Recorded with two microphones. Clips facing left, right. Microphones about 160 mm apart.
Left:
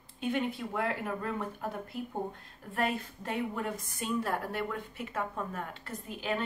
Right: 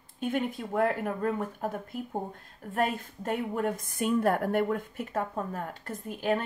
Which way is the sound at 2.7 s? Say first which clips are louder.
Right 3 dB; 45° right (ahead or behind).